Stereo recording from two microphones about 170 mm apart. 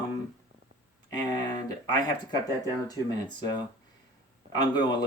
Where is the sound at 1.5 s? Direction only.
25° left (ahead or behind).